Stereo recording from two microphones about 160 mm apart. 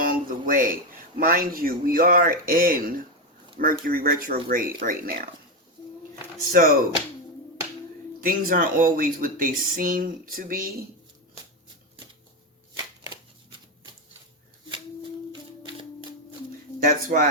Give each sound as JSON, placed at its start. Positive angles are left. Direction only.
{"t": 0.0, "sound": "a sound", "side_deg": -60}
{"t": 1.2, "sound": "speech", "side_deg": -65}
{"t": 6.5, "sound": "speech", "side_deg": -65}
{"t": 8.2, "sound": "speech", "side_deg": -60}
{"t": 15.3, "sound": "typewriter", "side_deg": -30}
{"t": 16.8, "sound": "speech", "side_deg": -55}